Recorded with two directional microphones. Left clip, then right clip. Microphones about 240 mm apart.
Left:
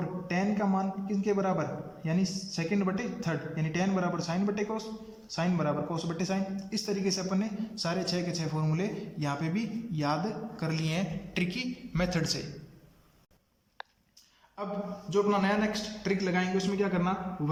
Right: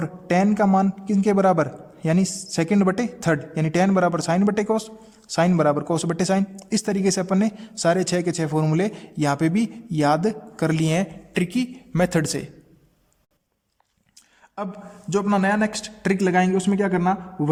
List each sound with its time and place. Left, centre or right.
0.0 s a man's voice: right
15.1 s a man's voice: right